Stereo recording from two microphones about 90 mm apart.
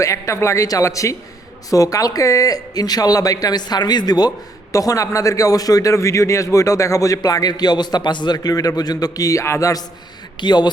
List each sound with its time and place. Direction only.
0.0 s a man's voice: 35° left (ahead or behind)
4.7 s a man's voice: 40° left (ahead or behind)
10.4 s speech: 55° left (ahead or behind)